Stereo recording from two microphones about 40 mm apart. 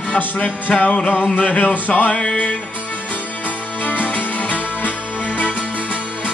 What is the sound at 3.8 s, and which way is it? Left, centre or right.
Music, left.